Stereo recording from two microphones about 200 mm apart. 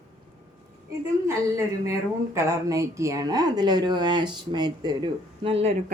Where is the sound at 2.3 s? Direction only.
15° right (ahead or behind).